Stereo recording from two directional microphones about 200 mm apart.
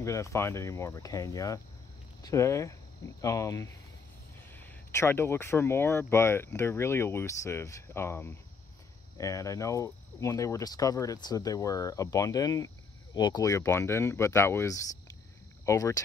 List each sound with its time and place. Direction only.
0.0 s speech: 15° left (ahead or behind)